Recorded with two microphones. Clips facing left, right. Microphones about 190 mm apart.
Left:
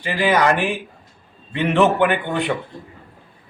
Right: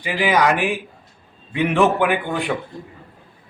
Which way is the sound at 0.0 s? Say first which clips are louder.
Left 1 dB; 10° right (ahead or behind).